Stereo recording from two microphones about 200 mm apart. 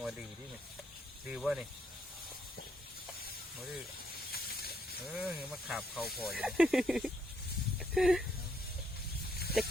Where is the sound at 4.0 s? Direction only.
50° left (ahead or behind).